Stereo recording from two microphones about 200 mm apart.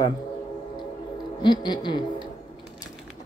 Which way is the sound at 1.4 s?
20° left (ahead or behind).